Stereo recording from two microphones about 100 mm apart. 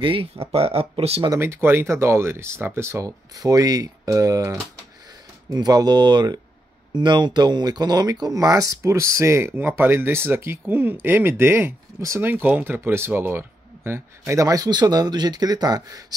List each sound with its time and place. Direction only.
0.0 s speech: 65° right (ahead or behind); by 1.2 s 85° right
1.3 s speech: 25° right (ahead or behind)